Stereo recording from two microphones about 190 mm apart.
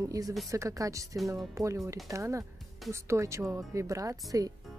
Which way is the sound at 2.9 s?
15° right (ahead or behind).